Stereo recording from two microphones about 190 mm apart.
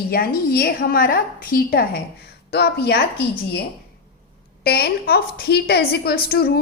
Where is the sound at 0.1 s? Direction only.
50° left (ahead or behind).